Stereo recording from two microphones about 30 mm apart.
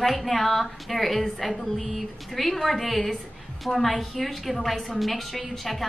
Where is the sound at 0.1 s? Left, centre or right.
Centre.